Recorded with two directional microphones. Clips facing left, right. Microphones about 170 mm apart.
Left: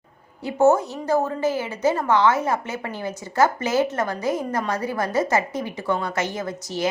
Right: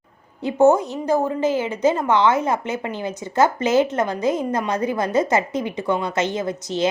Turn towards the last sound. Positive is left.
turn(degrees=-20)  # may be behind; listen again after turning